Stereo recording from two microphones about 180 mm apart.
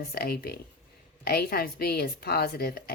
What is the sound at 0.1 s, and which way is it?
Speech, 60° left (ahead or behind).